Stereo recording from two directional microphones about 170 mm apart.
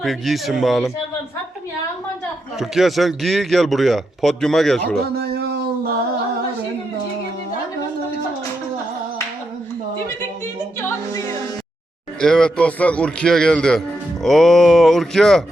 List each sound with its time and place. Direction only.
0.0 s a man's voice: centre (ahead or behind)
2.6 s a man's voice: centre (ahead or behind)
4.9 s a sound: 70° right (ahead or behind)
12.2 s a man's voice: 5° left (ahead or behind)